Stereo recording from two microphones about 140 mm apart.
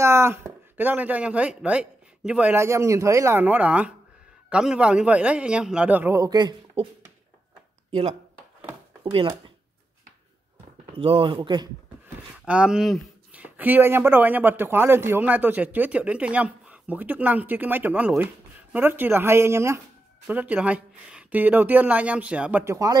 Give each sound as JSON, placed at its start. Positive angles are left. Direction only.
{"t": 0.0, "sound": "speech", "side_deg": -20}
{"t": 6.8, "sound": "a sound", "side_deg": -45}
{"t": 7.9, "sound": "speech", "side_deg": -50}
{"t": 9.0, "sound": "speech", "side_deg": -40}
{"t": 10.9, "sound": "speech", "side_deg": -40}
{"t": 12.4, "sound": "speech", "side_deg": -5}